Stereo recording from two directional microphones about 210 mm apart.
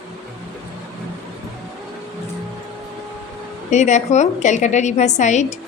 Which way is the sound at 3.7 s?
35° left (ahead or behind).